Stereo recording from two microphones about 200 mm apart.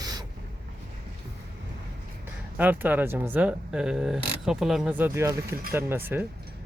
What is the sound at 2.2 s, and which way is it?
Speech, 10° right (ahead or behind).